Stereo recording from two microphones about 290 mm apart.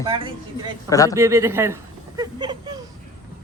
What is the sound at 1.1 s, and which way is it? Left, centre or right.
Speech, centre.